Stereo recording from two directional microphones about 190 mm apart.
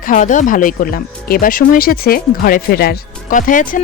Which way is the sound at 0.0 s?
40° left (ahead or behind).